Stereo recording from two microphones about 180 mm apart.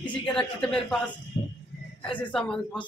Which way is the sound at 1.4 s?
35° left (ahead or behind).